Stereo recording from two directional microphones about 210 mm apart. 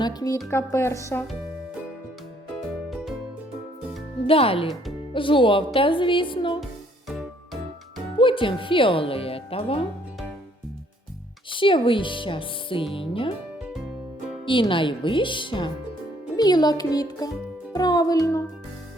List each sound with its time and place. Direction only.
0.0 s a woman's voice: 20° left (ahead or behind)
2.9 s music: centre (ahead or behind)
4.3 s speech: 25° left (ahead or behind)
7.1 s music: centre (ahead or behind)
8.2 s speech: 25° left (ahead or behind)
11.5 s speech: 25° left (ahead or behind)
14.4 s speech: 25° left (ahead or behind)